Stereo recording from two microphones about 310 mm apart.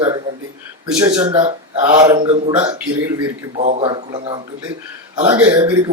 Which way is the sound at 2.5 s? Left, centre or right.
Centre.